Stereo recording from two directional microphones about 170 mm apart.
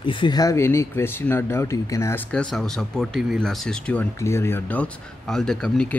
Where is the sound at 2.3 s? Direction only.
5° left (ahead or behind).